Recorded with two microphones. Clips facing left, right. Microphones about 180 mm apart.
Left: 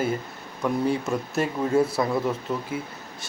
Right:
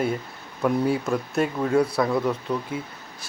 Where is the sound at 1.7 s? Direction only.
25° left (ahead or behind).